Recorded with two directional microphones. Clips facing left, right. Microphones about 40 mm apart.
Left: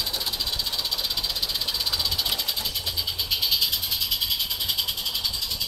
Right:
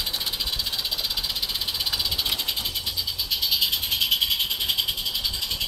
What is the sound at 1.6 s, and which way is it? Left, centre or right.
Vehicle, centre.